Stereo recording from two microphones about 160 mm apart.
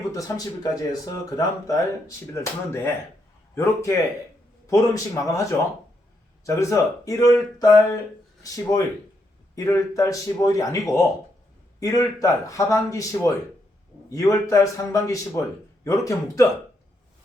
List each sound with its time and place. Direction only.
0.1 s a man's voice: 20° left (ahead or behind)